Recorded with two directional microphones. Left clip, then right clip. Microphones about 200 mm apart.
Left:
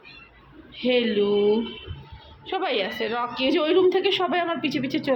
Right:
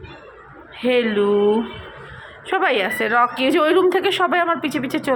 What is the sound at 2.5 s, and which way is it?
A woman's voice, 15° right (ahead or behind).